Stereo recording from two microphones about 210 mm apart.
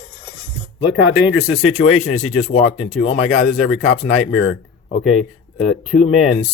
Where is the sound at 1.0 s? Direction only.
70° left (ahead or behind).